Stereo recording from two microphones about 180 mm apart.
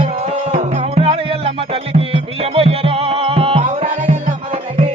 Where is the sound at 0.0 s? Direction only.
35° right (ahead or behind).